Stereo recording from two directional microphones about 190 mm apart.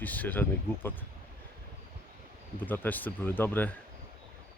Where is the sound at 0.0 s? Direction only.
10° left (ahead or behind).